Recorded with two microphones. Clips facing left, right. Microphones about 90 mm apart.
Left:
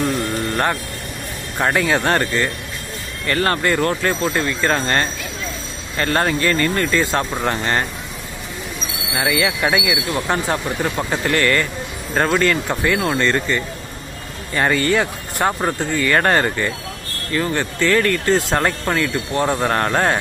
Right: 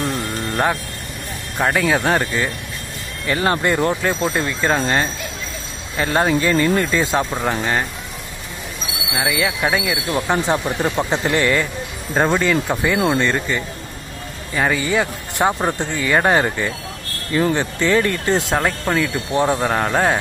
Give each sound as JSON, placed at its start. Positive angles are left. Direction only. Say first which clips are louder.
{"t": 1.6, "sound": "speech", "louder": "even", "side_deg": 0}
{"t": 7.2, "sound": "speech", "louder": "even", "side_deg": -5}
{"t": 9.1, "sound": "speech", "louder": "left 1 dB", "side_deg": -5}
{"t": 10.1, "sound": "speech", "louder": "right 4 dB", "side_deg": -15}
{"t": 18.6, "sound": "speech", "louder": "even", "side_deg": 0}